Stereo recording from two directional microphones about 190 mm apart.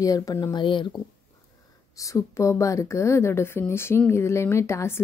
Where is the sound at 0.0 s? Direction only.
20° left (ahead or behind).